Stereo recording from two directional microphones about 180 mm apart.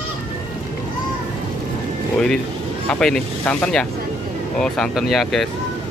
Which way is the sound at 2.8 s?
5° left (ahead or behind).